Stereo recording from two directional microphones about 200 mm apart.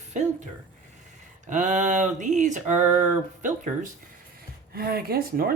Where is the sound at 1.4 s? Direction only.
35° right (ahead or behind).